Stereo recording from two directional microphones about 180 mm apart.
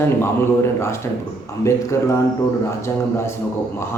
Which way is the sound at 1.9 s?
15° left (ahead or behind).